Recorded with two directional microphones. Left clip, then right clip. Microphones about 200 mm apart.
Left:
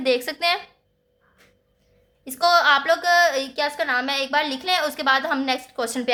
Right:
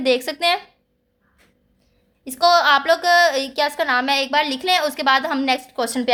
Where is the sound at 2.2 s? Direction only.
15° right (ahead or behind).